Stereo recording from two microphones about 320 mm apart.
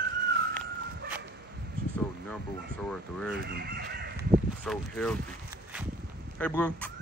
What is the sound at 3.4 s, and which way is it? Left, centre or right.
Chicken, right.